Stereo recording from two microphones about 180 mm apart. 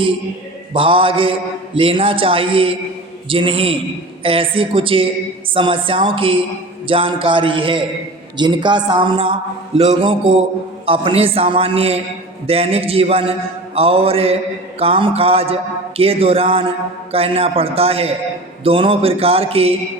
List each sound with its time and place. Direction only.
0.7 s mantra: 30° right (ahead or behind)
10.8 s a man's voice: 30° right (ahead or behind)